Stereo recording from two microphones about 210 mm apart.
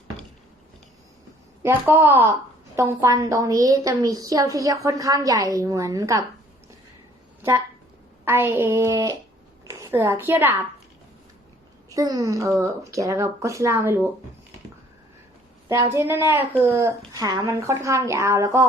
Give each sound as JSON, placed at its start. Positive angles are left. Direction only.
{"t": 1.6, "sound": "a woman's voice", "side_deg": -10}
{"t": 8.2, "sound": "a woman's voice", "side_deg": -10}
{"t": 11.9, "sound": "a woman's voice", "side_deg": -15}
{"t": 15.7, "sound": "a woman's voice", "side_deg": -10}